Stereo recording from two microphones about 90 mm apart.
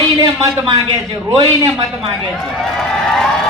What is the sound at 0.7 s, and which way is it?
A man's voice, 50° right (ahead or behind).